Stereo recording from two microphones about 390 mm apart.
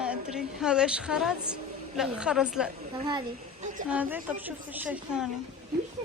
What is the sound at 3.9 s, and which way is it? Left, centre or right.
Speech, centre.